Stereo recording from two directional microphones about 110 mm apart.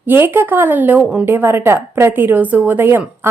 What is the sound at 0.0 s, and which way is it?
A woman's voice, 20° right (ahead or behind).